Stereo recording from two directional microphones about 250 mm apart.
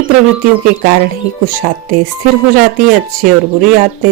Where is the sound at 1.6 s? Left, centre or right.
Right.